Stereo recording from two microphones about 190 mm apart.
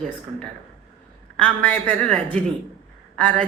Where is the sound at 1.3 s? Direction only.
5° left (ahead or behind).